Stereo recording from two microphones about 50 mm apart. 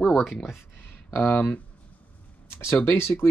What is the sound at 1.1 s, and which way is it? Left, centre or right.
Speech, left.